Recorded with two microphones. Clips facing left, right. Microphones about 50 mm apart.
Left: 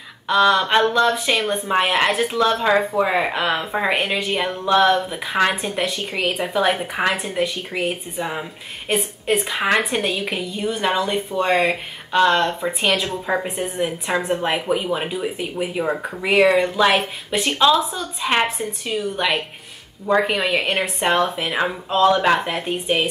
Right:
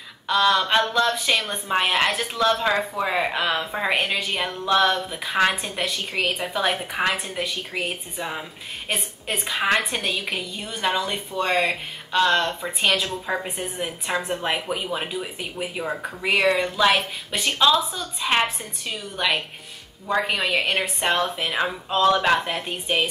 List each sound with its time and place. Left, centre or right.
0.3 s speech: centre